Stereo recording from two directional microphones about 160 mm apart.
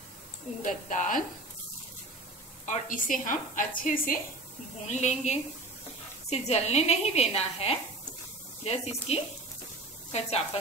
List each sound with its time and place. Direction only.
0.6 s a woman's voice: 50° left (ahead or behind)
2.6 s a woman's voice: 50° left (ahead or behind)
4.8 s a woman's voice: 45° left (ahead or behind)